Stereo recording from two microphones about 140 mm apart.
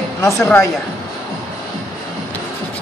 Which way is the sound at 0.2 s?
20° left (ahead or behind).